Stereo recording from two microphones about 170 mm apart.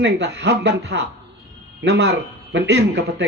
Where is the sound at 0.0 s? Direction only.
90° right.